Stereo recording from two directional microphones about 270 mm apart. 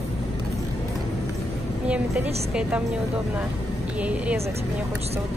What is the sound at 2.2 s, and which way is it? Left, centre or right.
Speech, right.